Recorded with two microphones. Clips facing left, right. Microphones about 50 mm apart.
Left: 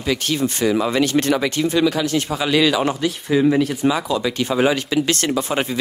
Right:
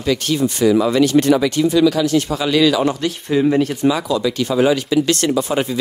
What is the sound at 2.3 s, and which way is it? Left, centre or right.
Speech, centre.